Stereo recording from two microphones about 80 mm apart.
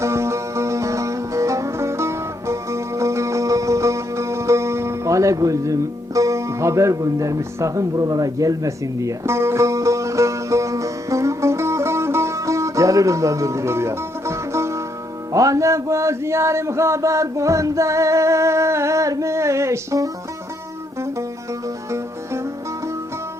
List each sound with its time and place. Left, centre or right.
0.0 s music: right